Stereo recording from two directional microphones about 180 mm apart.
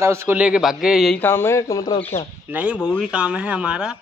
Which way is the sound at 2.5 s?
5° right (ahead or behind).